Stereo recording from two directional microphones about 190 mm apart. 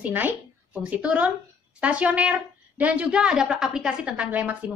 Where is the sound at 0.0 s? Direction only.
10° right (ahead or behind).